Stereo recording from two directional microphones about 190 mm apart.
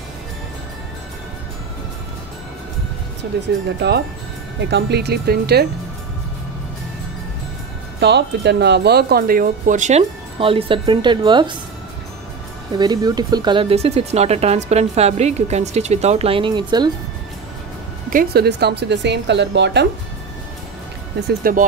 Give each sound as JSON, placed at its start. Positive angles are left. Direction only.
{"t": 3.3, "sound": "a woman's voice", "side_deg": -60}
{"t": 4.6, "sound": "a woman's voice", "side_deg": -60}
{"t": 8.0, "sound": "speech", "side_deg": -60}
{"t": 12.7, "sound": "speech", "side_deg": -20}
{"t": 18.1, "sound": "a woman's voice", "side_deg": -55}
{"t": 21.3, "sound": "speech", "side_deg": -50}